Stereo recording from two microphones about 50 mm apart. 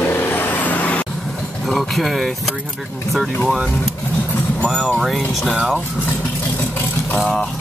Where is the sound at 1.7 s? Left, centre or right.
Centre.